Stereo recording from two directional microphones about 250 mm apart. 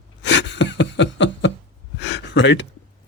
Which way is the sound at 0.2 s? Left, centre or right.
Left.